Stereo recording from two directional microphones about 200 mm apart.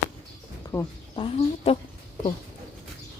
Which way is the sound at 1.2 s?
30° left (ahead or behind).